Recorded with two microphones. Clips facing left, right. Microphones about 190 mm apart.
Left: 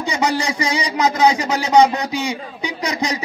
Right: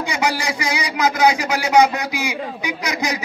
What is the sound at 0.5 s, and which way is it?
Speech, 35° left (ahead or behind).